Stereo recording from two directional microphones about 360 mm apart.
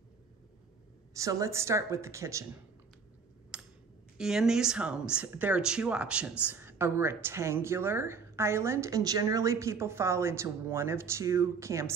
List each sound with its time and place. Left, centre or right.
1.1 s speech: centre
3.5 s a sound: centre
4.2 s speech: centre